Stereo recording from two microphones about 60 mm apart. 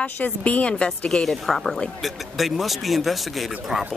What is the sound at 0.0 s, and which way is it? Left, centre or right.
Speech, left.